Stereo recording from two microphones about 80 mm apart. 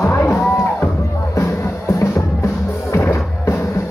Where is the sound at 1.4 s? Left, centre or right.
Left.